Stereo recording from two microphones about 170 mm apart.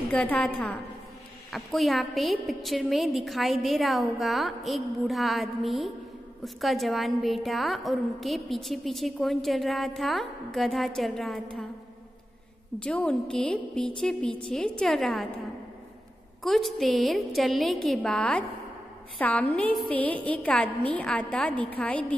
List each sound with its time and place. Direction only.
0.1 s a woman's voice: 5° left (ahead or behind)
12.7 s a woman's voice: 5° left (ahead or behind)
16.4 s a woman's voice: centre (ahead or behind)